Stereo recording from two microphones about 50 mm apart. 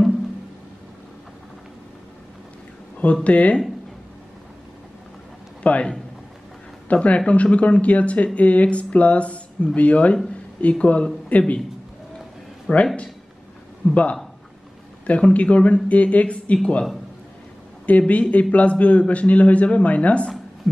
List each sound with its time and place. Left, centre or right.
3.3 s a man's voice: left
5.6 s a man's voice: left
6.9 s a man's voice: left
12.7 s a man's voice: left
13.8 s speech: left
15.0 s a man's voice: left
17.8 s a man's voice: left
20.7 s a sound: centre